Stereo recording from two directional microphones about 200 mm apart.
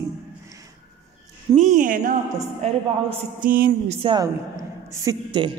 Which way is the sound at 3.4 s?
45° right (ahead or behind).